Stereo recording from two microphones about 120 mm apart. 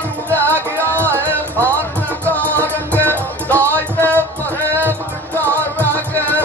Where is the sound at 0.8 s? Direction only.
20° right (ahead or behind).